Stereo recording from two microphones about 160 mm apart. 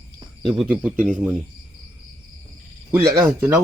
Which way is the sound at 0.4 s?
Centre (ahead or behind).